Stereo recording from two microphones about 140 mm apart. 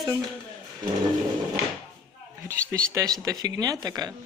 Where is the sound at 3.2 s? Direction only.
25° right (ahead or behind).